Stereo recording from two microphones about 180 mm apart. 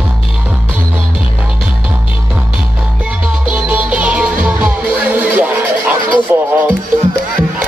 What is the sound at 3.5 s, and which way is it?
Music, 5° right (ahead or behind).